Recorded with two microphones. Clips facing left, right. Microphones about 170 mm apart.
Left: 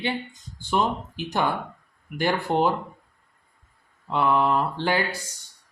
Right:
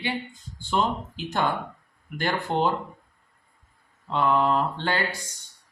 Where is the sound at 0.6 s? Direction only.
10° left (ahead or behind).